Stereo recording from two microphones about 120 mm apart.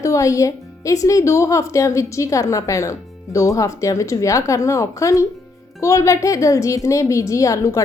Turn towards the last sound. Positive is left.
turn(degrees=25)  # may be behind; listen again after turning